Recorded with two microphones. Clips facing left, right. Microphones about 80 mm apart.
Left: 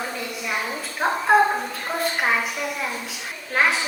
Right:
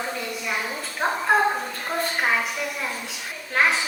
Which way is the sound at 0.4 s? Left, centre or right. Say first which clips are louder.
Left 3 dB; centre.